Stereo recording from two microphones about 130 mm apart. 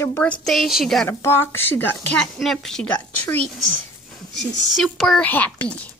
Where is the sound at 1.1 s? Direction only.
20° left (ahead or behind).